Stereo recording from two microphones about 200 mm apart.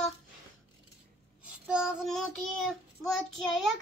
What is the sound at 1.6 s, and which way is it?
Child singing, 5° right (ahead or behind).